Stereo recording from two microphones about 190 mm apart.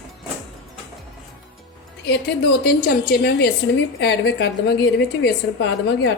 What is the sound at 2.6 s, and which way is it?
A woman's voice, 50° left (ahead or behind).